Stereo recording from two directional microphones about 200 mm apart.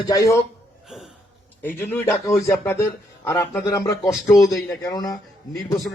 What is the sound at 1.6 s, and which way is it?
A man's voice, 10° left (ahead or behind).